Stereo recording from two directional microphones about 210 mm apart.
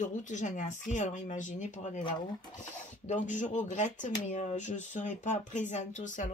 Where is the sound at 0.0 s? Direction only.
35° left (ahead or behind).